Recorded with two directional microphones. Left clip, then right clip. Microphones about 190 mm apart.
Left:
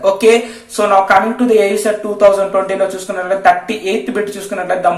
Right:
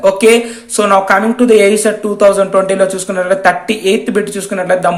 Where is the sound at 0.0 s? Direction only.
30° right (ahead or behind).